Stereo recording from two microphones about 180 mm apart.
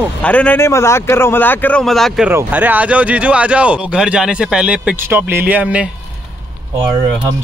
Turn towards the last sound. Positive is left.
turn(degrees=-5)  # may be behind; listen again after turning